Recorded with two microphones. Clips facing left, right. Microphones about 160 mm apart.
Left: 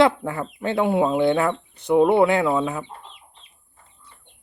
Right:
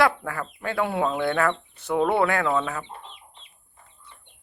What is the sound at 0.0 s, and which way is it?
Speech, 20° left (ahead or behind).